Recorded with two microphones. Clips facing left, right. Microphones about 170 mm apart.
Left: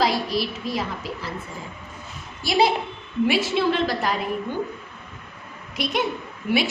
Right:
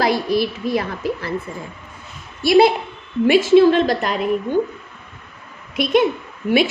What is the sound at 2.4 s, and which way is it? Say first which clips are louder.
A woman's voice: right 7 dB; 60° right (ahead or behind).